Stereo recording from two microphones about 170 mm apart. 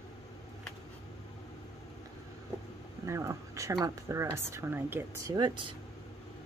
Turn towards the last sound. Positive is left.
turn(degrees=-25)  # may be behind; listen again after turning